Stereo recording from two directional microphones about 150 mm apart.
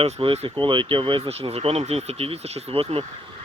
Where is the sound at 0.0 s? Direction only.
35° right (ahead or behind).